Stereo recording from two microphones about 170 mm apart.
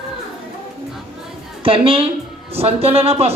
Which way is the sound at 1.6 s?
30° right (ahead or behind).